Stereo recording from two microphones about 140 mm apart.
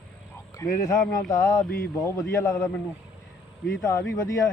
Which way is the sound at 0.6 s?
25° left (ahead or behind).